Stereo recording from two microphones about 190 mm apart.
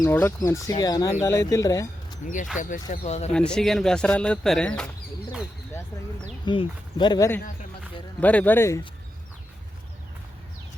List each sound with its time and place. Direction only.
0.0 s speech: 10° left (ahead or behind)
2.2 s speech: 40° left (ahead or behind)
3.3 s speech: 5° left (ahead or behind)
6.4 s speech: 25° left (ahead or behind)
8.2 s speech: 10° left (ahead or behind)